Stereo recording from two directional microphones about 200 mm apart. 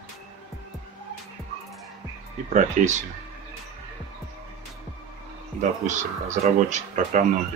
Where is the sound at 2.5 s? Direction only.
35° right (ahead or behind).